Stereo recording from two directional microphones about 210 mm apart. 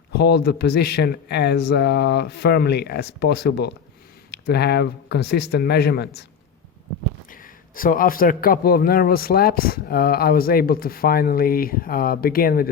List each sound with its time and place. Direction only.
0.1 s a man's voice: 50° left (ahead or behind)
7.8 s a man's voice: 40° left (ahead or behind)